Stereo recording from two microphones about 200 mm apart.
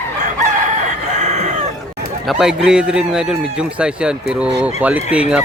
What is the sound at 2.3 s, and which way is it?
A man's voice, centre (ahead or behind).